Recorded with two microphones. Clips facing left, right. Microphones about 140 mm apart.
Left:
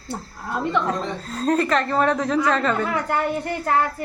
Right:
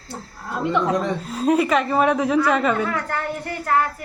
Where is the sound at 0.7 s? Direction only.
10° right (ahead or behind).